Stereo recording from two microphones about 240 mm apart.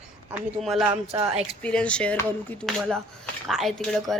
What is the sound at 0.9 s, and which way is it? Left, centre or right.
Speech, centre.